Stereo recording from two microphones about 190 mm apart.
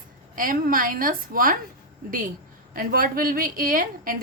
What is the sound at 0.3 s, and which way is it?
A woman's voice, 45° right (ahead or behind).